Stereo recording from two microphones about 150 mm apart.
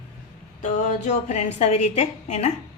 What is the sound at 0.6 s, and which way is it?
A woman's voice, 55° left (ahead or behind).